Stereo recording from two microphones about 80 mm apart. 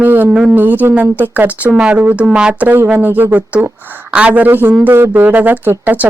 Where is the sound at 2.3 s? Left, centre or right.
Centre.